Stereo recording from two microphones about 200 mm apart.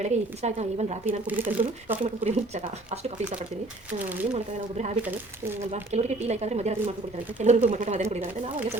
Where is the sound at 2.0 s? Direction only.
35° right (ahead or behind).